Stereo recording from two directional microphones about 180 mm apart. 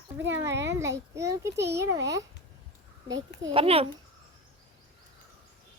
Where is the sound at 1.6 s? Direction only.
70° right (ahead or behind).